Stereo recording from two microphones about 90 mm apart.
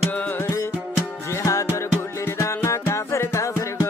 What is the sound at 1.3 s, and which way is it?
Music, 35° left (ahead or behind).